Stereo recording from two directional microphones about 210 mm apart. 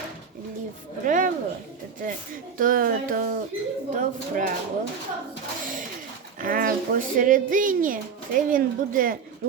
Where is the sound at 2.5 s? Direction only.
40° right (ahead or behind).